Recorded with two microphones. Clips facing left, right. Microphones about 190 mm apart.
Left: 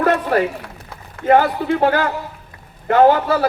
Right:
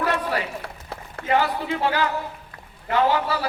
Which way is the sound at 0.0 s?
50° left (ahead or behind).